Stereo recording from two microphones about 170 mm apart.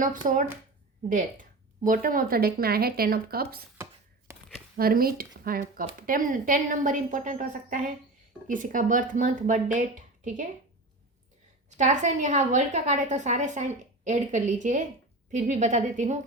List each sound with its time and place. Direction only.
0.2 s speech: 40° right (ahead or behind)
1.1 s speech: 50° right (ahead or behind)
4.3 s a sound: 15° right (ahead or behind)
4.8 s speech: 60° right (ahead or behind)
11.8 s speech: 45° right (ahead or behind)